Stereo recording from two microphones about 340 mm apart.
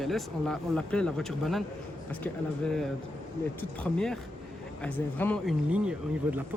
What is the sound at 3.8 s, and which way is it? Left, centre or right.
A man's voice, centre.